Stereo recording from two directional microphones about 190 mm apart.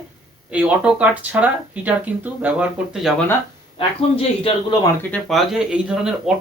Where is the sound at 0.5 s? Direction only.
5° right (ahead or behind).